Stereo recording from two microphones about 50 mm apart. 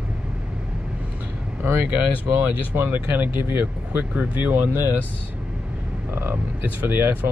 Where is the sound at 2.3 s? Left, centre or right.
Right.